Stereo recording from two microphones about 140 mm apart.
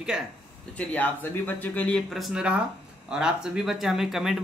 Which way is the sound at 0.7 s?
10° left (ahead or behind).